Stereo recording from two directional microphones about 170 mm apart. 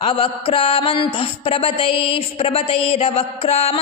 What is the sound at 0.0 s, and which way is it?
Music, 35° left (ahead or behind).